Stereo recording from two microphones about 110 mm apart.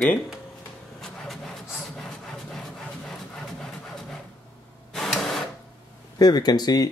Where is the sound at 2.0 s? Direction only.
5° left (ahead or behind).